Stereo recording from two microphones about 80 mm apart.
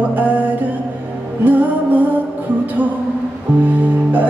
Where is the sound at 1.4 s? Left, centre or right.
Right.